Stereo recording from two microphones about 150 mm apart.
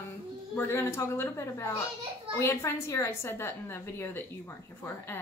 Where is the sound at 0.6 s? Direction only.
15° left (ahead or behind).